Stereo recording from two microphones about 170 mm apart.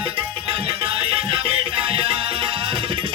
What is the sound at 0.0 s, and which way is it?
Music, 30° right (ahead or behind).